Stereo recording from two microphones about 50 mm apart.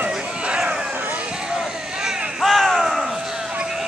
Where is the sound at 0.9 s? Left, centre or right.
Right.